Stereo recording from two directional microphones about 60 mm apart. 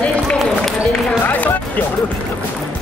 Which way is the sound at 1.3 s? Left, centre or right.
Left.